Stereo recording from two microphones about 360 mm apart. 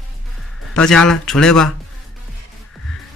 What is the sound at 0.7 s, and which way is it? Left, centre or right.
Speech, centre.